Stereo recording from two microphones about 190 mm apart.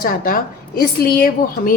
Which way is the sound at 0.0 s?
50° left (ahead or behind).